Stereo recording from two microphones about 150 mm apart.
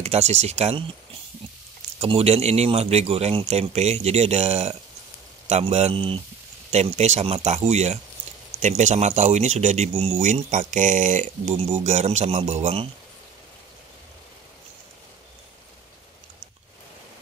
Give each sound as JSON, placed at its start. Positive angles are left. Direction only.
{"t": 0.0, "sound": "speech", "side_deg": -45}
{"t": 2.0, "sound": "speech", "side_deg": -40}